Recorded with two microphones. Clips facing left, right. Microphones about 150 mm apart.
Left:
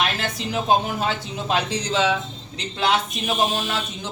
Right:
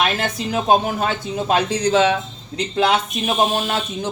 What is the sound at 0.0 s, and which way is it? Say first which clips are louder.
Speech: right 4 dB; 50° right (ahead or behind).